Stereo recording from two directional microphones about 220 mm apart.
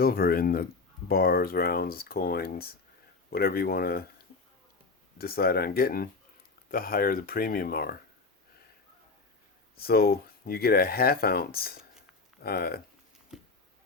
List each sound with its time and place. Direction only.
0.0 s speech: 45° left (ahead or behind)
5.1 s speech: 45° left (ahead or behind)
9.8 s speech: 45° left (ahead or behind)
13.3 s a sound: centre (ahead or behind)